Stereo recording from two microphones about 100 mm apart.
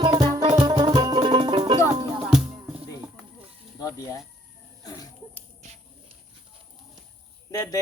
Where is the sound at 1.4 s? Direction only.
65° right (ahead or behind).